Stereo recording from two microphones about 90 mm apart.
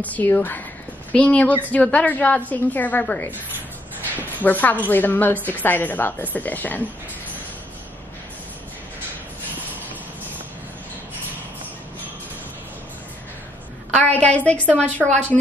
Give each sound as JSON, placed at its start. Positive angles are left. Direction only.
{"t": 0.0, "sound": "a woman's voice", "side_deg": 20}
{"t": 4.4, "sound": "a woman's voice", "side_deg": 20}
{"t": 14.1, "sound": "a woman's voice", "side_deg": 15}